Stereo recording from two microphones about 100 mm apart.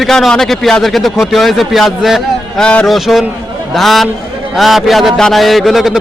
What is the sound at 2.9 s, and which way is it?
Speech, centre (ahead or behind).